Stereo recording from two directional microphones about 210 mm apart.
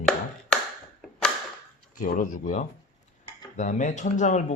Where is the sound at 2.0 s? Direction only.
40° left (ahead or behind).